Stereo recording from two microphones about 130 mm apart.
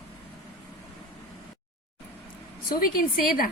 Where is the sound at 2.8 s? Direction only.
90° left.